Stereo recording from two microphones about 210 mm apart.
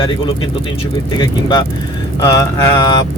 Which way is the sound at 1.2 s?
20° left (ahead or behind).